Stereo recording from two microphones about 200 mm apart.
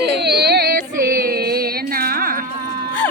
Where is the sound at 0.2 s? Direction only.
55° right (ahead or behind).